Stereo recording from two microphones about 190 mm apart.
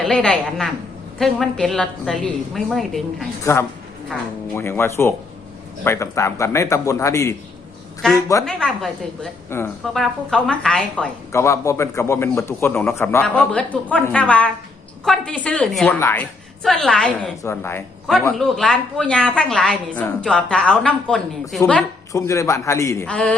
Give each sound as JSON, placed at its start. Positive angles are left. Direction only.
{"t": 0.0, "sound": "a woman's voice", "side_deg": 5}
{"t": 3.4, "sound": "a woman's voice", "side_deg": 10}
{"t": 8.0, "sound": "a woman's voice", "side_deg": 5}
{"t": 16.6, "sound": "a woman's voice", "side_deg": 5}